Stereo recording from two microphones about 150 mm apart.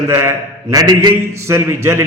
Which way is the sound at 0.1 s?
15° right (ahead or behind).